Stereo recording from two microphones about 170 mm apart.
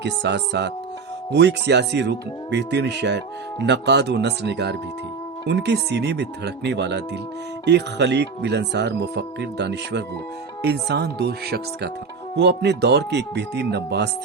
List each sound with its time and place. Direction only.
0.0 s speech: 90° right
10.6 s speech: 75° right (ahead or behind)
12.4 s speech: 90° right